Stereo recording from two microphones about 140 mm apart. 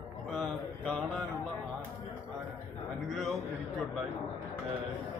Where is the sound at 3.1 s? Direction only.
Centre (ahead or behind).